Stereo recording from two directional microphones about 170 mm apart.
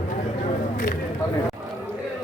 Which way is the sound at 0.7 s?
55° left (ahead or behind).